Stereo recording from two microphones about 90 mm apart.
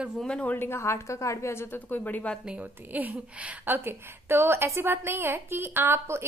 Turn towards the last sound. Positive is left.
turn(degrees=-25)  # may be behind; listen again after turning